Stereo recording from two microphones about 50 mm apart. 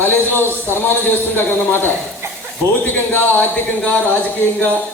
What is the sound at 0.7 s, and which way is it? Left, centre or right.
Speech, left.